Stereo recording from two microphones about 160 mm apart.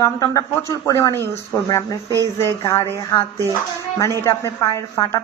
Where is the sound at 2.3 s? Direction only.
15° left (ahead or behind).